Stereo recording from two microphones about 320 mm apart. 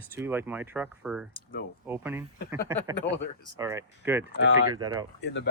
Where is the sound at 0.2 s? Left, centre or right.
Centre.